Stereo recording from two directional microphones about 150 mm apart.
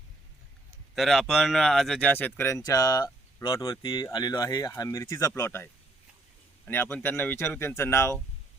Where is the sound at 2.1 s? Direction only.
10° left (ahead or behind).